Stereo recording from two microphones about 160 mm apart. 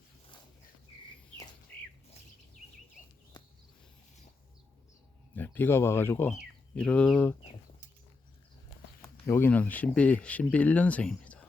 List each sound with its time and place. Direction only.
3.3 s a sound: 25° left (ahead or behind)
5.3 s speech: 10° left (ahead or behind)
9.0 s speech: 15° left (ahead or behind)